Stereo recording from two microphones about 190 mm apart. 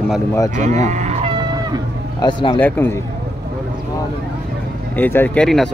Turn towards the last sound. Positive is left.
turn(degrees=5)  # may be behind; listen again after turning